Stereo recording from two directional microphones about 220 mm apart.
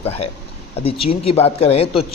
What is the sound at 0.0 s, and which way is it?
Speech, 25° left (ahead or behind).